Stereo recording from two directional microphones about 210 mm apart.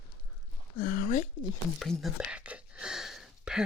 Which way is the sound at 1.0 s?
40° left (ahead or behind).